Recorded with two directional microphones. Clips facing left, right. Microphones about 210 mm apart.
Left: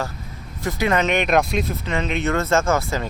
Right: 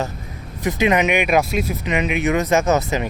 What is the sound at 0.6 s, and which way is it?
Speech, 20° right (ahead or behind).